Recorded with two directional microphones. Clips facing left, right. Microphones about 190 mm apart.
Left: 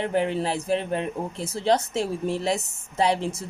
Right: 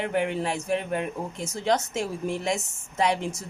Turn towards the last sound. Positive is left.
turn(degrees=30)  # may be behind; listen again after turning